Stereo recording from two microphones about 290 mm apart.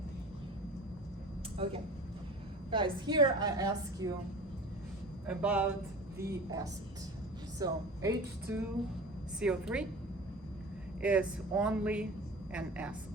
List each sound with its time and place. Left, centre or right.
2.6 s a woman's voice: centre
5.3 s a woman's voice: centre
11.0 s speech: centre